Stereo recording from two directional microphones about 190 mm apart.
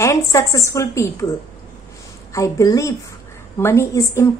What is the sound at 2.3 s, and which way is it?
A woman's voice, 15° left (ahead or behind).